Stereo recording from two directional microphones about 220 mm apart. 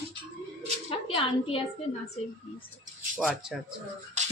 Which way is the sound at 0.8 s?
25° left (ahead or behind).